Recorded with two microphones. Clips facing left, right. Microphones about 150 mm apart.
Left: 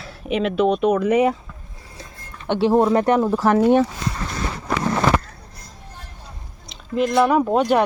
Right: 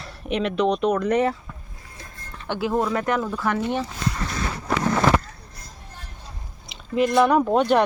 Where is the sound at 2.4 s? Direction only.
30° left (ahead or behind); by 3.9 s 50° left (ahead or behind).